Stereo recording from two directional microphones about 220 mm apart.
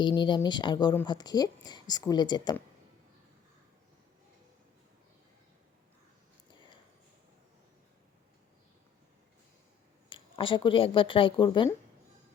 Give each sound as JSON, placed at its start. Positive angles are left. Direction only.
{"t": 0.0, "sound": "speech", "side_deg": 20}
{"t": 10.1, "sound": "speech", "side_deg": 20}